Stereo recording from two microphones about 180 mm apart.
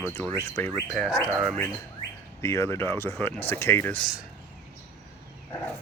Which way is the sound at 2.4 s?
15° left (ahead or behind).